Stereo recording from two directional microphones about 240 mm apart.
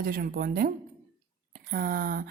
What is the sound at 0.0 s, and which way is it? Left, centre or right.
Speech, right.